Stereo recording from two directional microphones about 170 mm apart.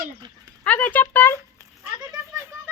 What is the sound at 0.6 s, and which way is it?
Speech, 10° left (ahead or behind).